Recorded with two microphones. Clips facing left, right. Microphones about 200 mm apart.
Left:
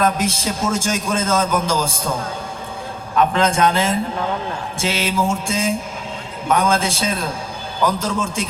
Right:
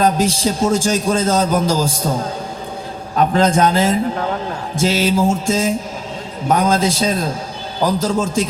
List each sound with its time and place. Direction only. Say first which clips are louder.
0.0 s a man's voice: right 4 dB; 35° right (ahead or behind)
3.2 s a man's voice: right 3 dB; 40° right (ahead or behind)